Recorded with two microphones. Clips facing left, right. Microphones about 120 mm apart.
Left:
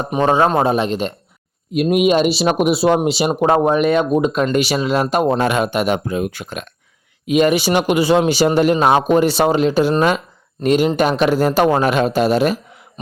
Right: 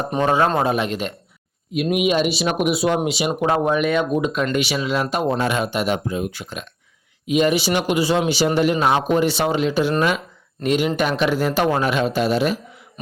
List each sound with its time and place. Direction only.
0.2 s a man's voice: 25° left (ahead or behind)
1.7 s speech: 40° left (ahead or behind); by 8.2 s 60° left (ahead or behind)
8.2 s a man's voice: 45° left (ahead or behind)